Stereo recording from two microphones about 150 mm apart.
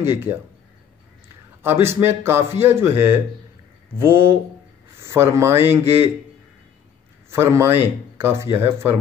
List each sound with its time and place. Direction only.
0.0 s speech: 15° right (ahead or behind)
1.6 s speech: 15° right (ahead or behind)
7.2 s a man's voice: 20° right (ahead or behind)